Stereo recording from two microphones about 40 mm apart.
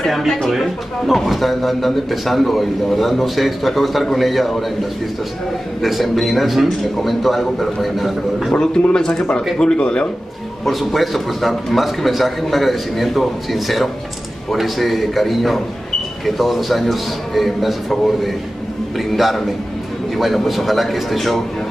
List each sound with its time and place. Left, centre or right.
0.0 s speech: centre
5.8 s speech: centre
8.9 s speech: centre
10.6 s speech: centre